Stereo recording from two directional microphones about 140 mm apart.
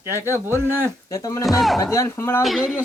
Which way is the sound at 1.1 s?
25° left (ahead or behind).